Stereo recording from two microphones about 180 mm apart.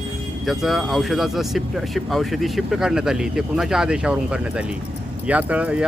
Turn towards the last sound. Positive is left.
turn(degrees=-10)  # may be behind; listen again after turning